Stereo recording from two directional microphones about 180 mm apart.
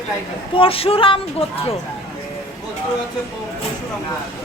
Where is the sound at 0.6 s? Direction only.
30° left (ahead or behind).